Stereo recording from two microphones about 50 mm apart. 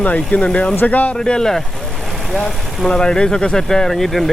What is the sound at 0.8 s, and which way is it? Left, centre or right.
Speech, left.